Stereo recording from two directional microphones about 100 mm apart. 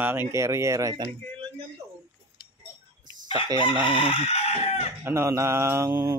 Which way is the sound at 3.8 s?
60° left (ahead or behind).